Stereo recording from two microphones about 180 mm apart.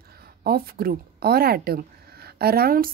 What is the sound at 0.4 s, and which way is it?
A woman's voice, 55° right (ahead or behind).